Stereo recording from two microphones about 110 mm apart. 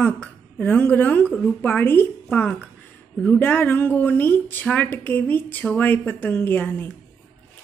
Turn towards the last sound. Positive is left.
turn(degrees=15)  # may be behind; listen again after turning